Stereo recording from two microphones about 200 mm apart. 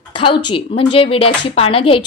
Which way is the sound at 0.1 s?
25° left (ahead or behind).